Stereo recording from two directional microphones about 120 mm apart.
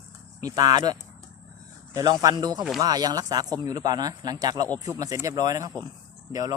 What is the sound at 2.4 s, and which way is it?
Speech, 35° right (ahead or behind).